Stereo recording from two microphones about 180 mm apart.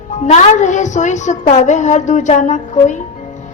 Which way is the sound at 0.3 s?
40° left (ahead or behind).